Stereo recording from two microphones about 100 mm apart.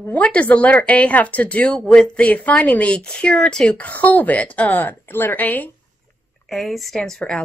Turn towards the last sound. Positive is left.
turn(degrees=5)  # may be behind; listen again after turning